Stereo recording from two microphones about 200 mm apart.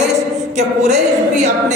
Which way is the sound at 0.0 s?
35° right (ahead or behind).